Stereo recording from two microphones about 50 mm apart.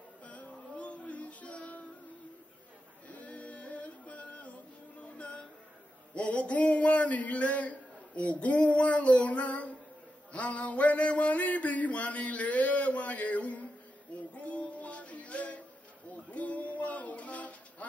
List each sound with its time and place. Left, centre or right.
0.2 s music: left
3.1 s music: left
6.1 s a man's voice: left
14.3 s music: left
16.3 s a sound: left